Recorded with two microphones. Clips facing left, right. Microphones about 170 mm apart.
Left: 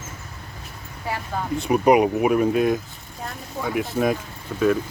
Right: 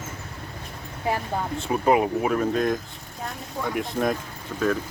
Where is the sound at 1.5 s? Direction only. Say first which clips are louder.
Left 5 dB; 15° left (ahead or behind).